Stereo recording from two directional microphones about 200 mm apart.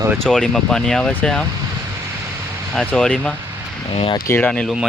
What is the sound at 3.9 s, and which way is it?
Speech, 25° left (ahead or behind).